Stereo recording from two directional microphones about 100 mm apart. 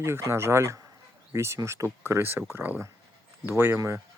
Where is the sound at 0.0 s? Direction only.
25° right (ahead or behind).